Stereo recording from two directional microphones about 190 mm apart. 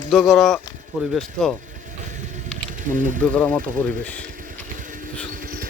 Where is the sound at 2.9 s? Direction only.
40° right (ahead or behind).